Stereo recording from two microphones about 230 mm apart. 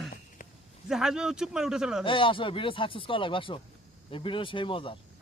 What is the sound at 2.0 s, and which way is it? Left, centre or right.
Speech, left.